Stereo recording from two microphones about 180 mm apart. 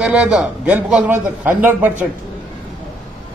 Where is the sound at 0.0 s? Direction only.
5° right (ahead or behind).